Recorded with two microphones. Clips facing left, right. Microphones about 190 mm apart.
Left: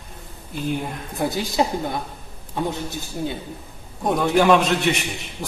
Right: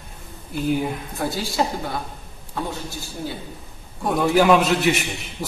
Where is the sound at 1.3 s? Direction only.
20° left (ahead or behind).